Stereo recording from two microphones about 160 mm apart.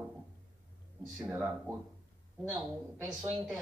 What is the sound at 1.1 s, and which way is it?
A woman's voice, 5° right (ahead or behind).